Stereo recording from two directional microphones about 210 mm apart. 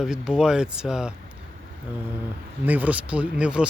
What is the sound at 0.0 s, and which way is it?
Speech, 5° right (ahead or behind).